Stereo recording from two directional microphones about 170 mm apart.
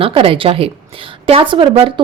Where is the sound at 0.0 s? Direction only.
35° right (ahead or behind).